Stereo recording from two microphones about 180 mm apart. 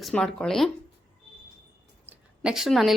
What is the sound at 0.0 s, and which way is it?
Speech, centre (ahead or behind).